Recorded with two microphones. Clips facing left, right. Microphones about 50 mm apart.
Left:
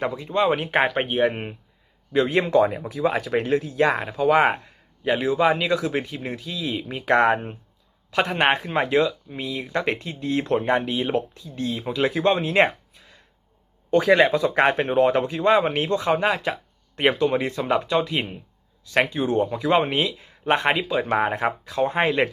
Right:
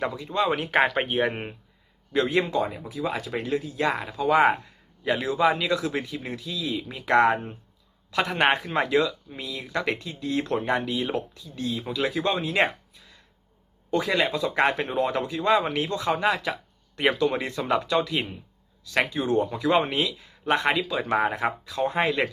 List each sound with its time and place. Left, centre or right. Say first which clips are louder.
0.3 s speech: left 3 dB; left
0.8 s speech: left 1 dB; centre
2.2 s speech: left 1 dB; left
2.5 s speech: left 8 dB; left
3.9 s speech: left 3 dB; left
5.4 s speech: left 2 dB; left
17.6 s speech: left 2 dB; centre
17.9 s speech: left 2 dB; left